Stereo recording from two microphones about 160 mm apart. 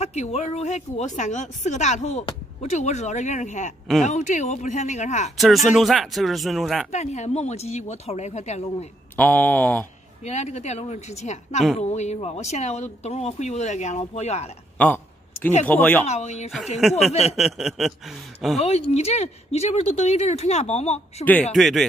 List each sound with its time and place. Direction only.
0.0 s speech: 40° left (ahead or behind)
5.4 s speech: centre (ahead or behind)
6.9 s speech: 45° left (ahead or behind)
9.1 s speech: 10° left (ahead or behind)
10.2 s speech: 45° left (ahead or behind)
15.6 s speech: 10° left (ahead or behind)
16.1 s speech: 45° left (ahead or behind)
16.5 s speech: centre (ahead or behind)
17.1 s speech: 40° left (ahead or behind)
17.4 s speech: centre (ahead or behind)
18.6 s speech: 40° left (ahead or behind)
21.2 s speech: 10° left (ahead or behind)